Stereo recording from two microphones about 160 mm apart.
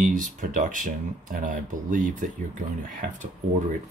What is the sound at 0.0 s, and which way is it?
Speech, 55° right (ahead or behind).